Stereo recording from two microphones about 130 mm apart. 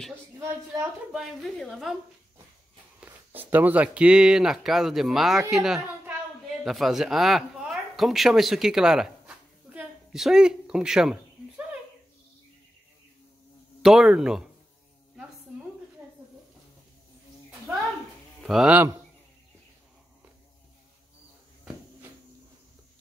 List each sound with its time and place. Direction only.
0.4 s a woman's voice: 20° right (ahead or behind)
1.1 s speech: centre (ahead or behind)
3.0 s speech: 15° right (ahead or behind)
13.8 s speech: 5° right (ahead or behind)
18.4 s speech: 5° right (ahead or behind)